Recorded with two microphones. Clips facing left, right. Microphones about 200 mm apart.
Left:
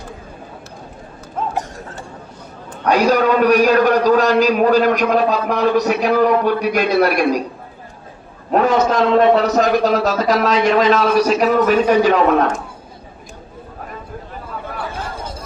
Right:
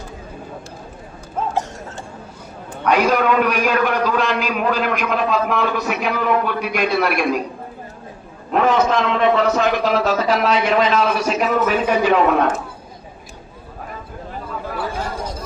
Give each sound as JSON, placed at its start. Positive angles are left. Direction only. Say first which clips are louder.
{"t": 2.8, "sound": "a man's voice", "louder": "left 2 dB", "side_deg": 40}
{"t": 8.5, "sound": "a man's voice", "louder": "left 2 dB", "side_deg": 40}